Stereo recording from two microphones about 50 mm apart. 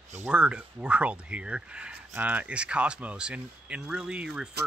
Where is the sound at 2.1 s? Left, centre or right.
Right.